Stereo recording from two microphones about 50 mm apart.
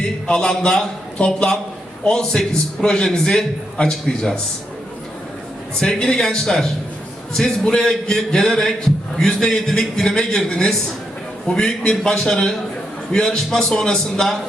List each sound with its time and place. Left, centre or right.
0.3 s a man's voice: centre
5.8 s a man's voice: centre